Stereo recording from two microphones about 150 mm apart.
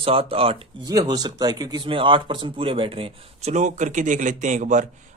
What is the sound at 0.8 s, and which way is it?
Speech, 25° right (ahead or behind).